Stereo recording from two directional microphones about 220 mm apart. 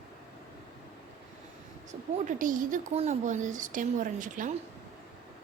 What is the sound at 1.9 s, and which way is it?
Speech, 35° right (ahead or behind).